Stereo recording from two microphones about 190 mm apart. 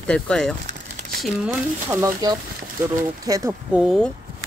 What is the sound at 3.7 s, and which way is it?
Speech, centre (ahead or behind).